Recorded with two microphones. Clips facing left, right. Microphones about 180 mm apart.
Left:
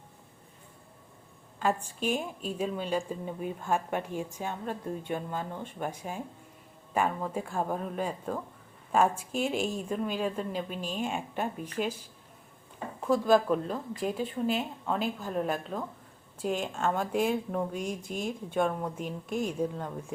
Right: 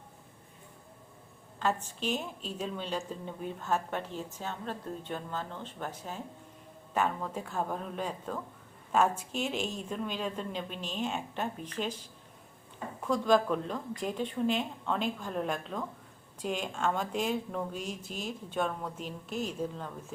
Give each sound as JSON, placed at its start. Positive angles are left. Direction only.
{"t": 1.5, "sound": "a woman's voice", "side_deg": 10}
{"t": 13.1, "sound": "a woman's voice", "side_deg": 5}
{"t": 18.1, "sound": "speech", "side_deg": 55}
{"t": 18.5, "sound": "a woman's voice", "side_deg": 10}